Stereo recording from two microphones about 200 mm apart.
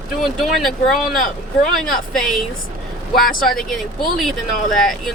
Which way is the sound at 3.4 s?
Centre (ahead or behind).